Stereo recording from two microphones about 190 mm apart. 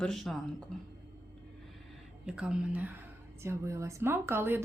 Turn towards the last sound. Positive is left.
turn(degrees=-10)  # may be behind; listen again after turning